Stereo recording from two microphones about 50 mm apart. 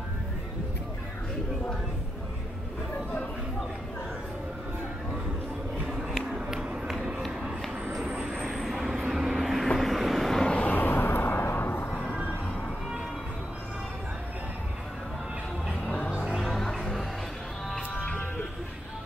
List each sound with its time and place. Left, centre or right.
6.0 s a sound: centre
6.9 s run: centre
8.0 s vehicle: centre
10.4 s vehicle: left
10.8 s vehicle: left
16.3 s music: centre